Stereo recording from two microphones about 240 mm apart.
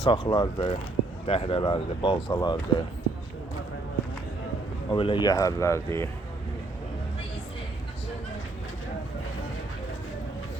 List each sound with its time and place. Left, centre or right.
0.0 s speech: centre
4.9 s speech: left